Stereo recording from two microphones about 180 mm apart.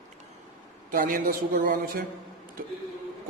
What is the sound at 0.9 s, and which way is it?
A man's voice, 50° right (ahead or behind).